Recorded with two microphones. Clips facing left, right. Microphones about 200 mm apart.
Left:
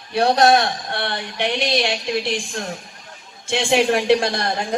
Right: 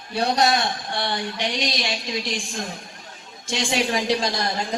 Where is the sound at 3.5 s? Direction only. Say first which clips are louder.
Left 6 dB; 55° left (ahead or behind).